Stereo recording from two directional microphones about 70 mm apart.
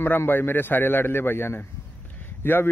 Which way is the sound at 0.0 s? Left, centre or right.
Left.